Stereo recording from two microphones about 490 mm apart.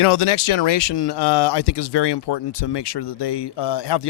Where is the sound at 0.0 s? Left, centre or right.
Left.